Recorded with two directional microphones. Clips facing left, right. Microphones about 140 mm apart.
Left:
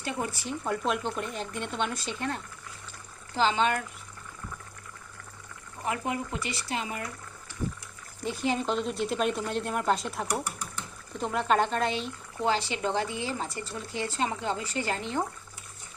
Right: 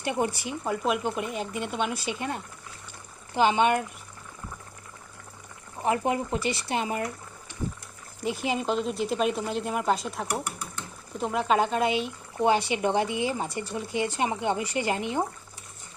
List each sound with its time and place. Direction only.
0.0 s speech: 20° right (ahead or behind)
0.4 s speech: 10° right (ahead or behind)
5.8 s speech: 25° right (ahead or behind)
8.2 s speech: 10° right (ahead or behind)